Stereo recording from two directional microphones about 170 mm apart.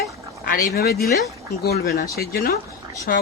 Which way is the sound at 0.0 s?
65° left (ahead or behind).